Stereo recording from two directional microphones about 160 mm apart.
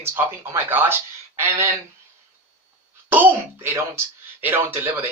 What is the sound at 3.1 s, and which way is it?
A man's voice, 15° right (ahead or behind).